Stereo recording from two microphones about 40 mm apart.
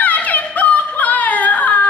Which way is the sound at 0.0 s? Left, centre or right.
Left.